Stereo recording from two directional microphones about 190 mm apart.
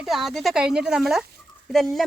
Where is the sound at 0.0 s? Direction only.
Centre (ahead or behind).